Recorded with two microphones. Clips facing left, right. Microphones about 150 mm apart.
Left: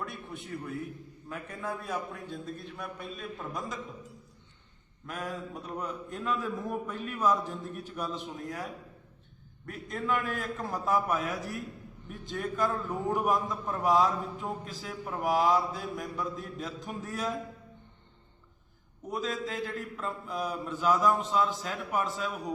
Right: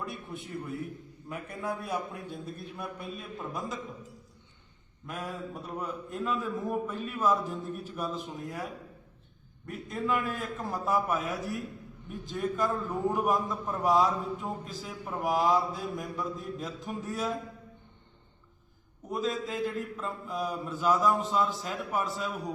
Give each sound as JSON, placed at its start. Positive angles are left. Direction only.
{"t": 0.0, "sound": "a man's voice", "side_deg": 0}
{"t": 1.3, "sound": "a man's voice", "side_deg": -10}
{"t": 5.0, "sound": "a man's voice", "side_deg": -5}
{"t": 9.6, "sound": "a man's voice", "side_deg": -5}
{"t": 19.1, "sound": "a man's voice", "side_deg": 0}